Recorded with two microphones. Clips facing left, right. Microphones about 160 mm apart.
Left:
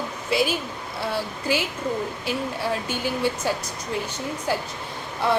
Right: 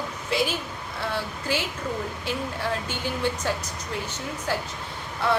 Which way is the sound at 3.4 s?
10° left (ahead or behind).